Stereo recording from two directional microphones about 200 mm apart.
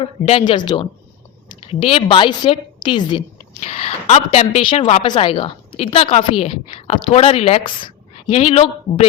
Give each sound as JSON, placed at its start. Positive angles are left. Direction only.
{"t": 0.0, "sound": "a woman's voice", "side_deg": 30}